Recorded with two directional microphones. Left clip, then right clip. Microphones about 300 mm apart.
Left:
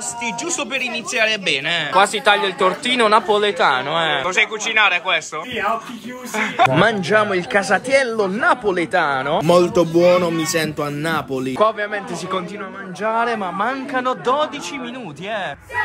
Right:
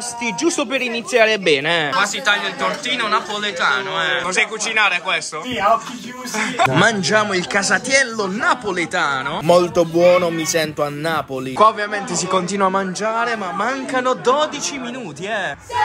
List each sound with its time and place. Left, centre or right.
0.8 s speech: centre
4.3 s speech: centre
6.3 s speech: centre